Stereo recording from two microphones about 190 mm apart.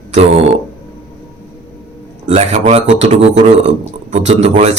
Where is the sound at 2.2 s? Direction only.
35° right (ahead or behind).